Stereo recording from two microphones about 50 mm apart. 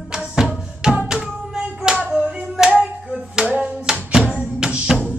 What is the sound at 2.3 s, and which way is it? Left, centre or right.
Hands, centre.